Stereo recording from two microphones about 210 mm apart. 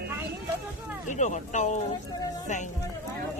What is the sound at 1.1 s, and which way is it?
Speech, 35° left (ahead or behind).